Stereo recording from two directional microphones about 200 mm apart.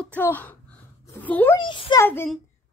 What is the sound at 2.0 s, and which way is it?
Speech, 10° left (ahead or behind).